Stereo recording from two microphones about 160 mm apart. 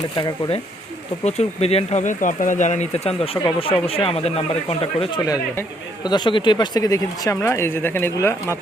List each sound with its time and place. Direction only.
0.2 s speech: 30° left (ahead or behind)
1.2 s speech: 45° left (ahead or behind)
5.2 s speech: 20° left (ahead or behind)